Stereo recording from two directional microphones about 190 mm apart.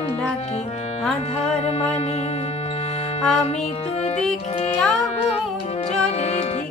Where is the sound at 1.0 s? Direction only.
5° left (ahead or behind).